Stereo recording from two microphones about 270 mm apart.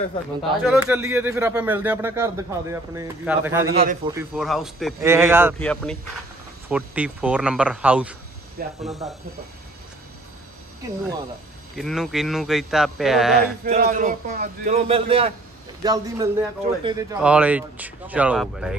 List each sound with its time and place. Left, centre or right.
0.7 s speech: centre
3.7 s a man's voice: right
4.1 s speech: centre
5.6 s a man's voice: centre
11.7 s a man's voice: centre
13.7 s a man's voice: right; by 18.8 s centre